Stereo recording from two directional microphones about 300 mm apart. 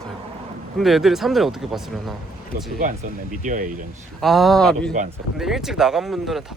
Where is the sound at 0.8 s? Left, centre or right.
Centre.